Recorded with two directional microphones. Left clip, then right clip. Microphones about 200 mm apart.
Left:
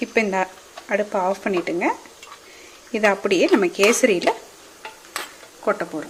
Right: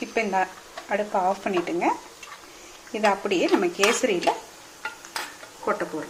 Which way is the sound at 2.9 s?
35° left (ahead or behind).